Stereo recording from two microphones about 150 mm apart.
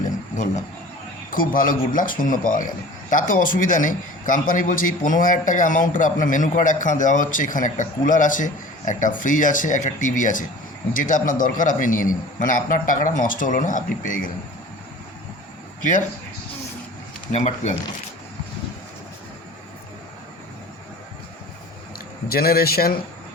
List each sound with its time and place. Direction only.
1.3 s a man's voice: 65° left (ahead or behind)
15.8 s speech: 60° left (ahead or behind)
17.3 s speech: 50° left (ahead or behind)
22.3 s a man's voice: 90° left